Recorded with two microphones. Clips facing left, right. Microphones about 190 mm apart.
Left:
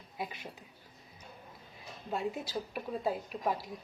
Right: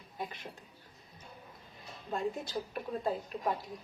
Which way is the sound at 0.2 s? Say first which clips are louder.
Left 1 dB; 10° left (ahead or behind).